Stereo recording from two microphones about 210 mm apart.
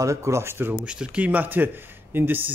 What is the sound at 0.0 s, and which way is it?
A man's voice, 15° right (ahead or behind).